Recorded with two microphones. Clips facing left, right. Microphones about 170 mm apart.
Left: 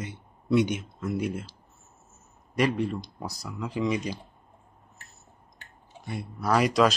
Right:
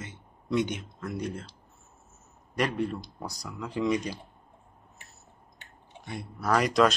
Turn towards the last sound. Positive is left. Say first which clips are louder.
# left 1 dB
turn(degrees=0)  # may be behind; listen again after turning